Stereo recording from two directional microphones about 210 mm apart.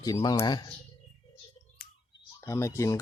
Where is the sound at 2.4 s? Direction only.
15° left (ahead or behind).